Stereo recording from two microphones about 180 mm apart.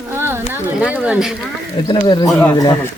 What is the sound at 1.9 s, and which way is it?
Speech, 25° left (ahead or behind).